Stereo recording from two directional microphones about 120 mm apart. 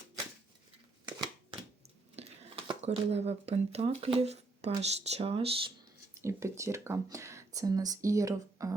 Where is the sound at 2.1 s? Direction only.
60° right (ahead or behind).